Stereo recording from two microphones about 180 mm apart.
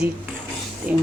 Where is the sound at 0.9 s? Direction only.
10° right (ahead or behind).